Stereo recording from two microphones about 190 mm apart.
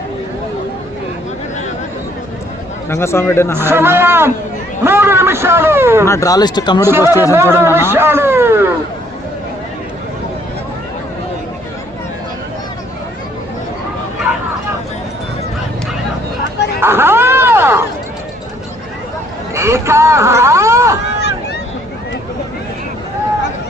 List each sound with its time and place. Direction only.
2.9 s speech: 15° left (ahead or behind)
3.6 s a man's voice: 10° right (ahead or behind)
6.1 s speech: 15° left (ahead or behind)
6.8 s a man's voice: 15° right (ahead or behind)
16.8 s cat: 10° right (ahead or behind)
19.5 s a sound: 15° right (ahead or behind)